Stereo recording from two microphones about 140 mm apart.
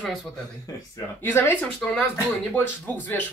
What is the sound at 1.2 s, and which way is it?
Speech, 15° left (ahead or behind).